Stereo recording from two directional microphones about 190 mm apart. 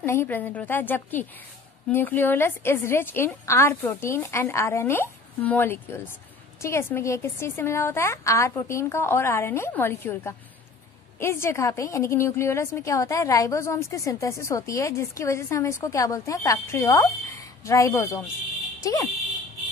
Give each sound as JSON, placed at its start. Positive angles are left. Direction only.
{"t": 0.0, "sound": "a woman's voice", "side_deg": 15}